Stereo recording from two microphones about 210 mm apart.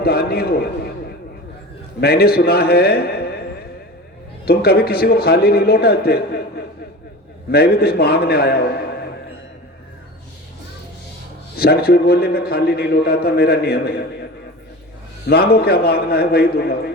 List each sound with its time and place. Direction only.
0.0 s a man's voice: 45° left (ahead or behind)
2.0 s a man's voice: 50° left (ahead or behind)
4.4 s a man's voice: 45° left (ahead or behind)
7.5 s a man's voice: 50° left (ahead or behind)
11.5 s a man's voice: 45° left (ahead or behind)
15.3 s a man's voice: 50° left (ahead or behind)